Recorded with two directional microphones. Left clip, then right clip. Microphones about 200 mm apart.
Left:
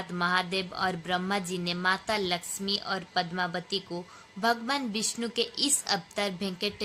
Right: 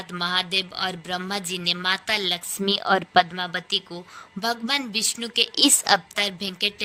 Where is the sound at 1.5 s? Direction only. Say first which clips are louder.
Right 7 dB; 55° right (ahead or behind).